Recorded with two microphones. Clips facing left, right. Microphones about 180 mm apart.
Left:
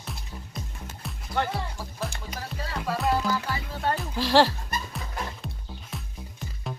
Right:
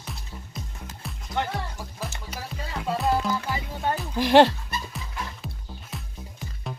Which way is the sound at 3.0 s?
Centre (ahead or behind).